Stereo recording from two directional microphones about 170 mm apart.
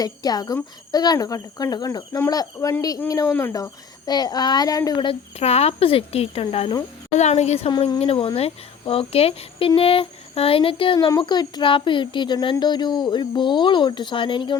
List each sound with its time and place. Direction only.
0.0 s speech: 20° left (ahead or behind); by 7.7 s 40° left (ahead or behind)
7.7 s speech: 30° left (ahead or behind)